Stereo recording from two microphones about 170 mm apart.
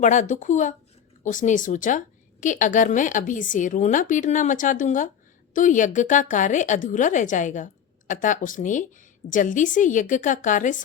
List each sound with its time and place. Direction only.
0.0 s a woman's voice: 45° left (ahead or behind)